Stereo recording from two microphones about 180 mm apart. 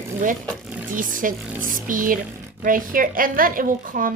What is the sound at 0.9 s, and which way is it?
Speech, 50° right (ahead or behind).